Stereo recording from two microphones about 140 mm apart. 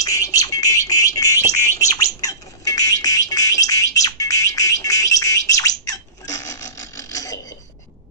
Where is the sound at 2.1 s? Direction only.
25° left (ahead or behind).